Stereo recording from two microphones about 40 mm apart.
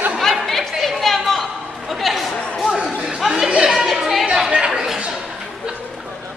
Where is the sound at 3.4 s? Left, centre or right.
Right.